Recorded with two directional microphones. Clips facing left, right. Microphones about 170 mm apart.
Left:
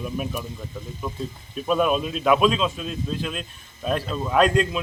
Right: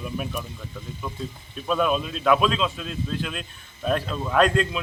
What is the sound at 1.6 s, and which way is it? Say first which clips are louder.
Speech: left 2 dB; 10° left (ahead or behind).